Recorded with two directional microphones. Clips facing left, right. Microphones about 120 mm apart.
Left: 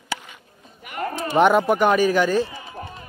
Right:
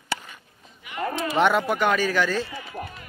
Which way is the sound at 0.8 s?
45° left (ahead or behind).